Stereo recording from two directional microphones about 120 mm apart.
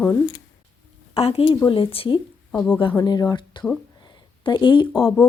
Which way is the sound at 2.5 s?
10° left (ahead or behind).